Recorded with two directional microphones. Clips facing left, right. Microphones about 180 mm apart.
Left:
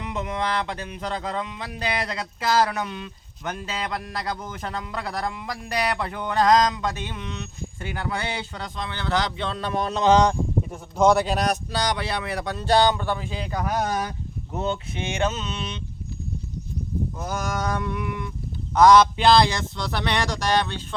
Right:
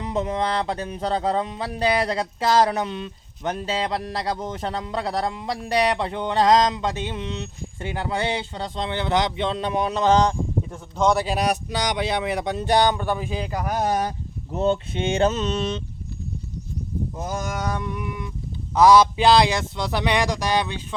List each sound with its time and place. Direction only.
0.0 s speech: 35° right (ahead or behind); by 13.8 s 15° right (ahead or behind)
13.8 s speech: 35° right (ahead or behind)
17.2 s speech: 25° right (ahead or behind)